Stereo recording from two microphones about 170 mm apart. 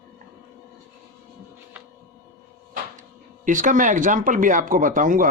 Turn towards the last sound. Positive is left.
turn(degrees=-50)  # may be behind; listen again after turning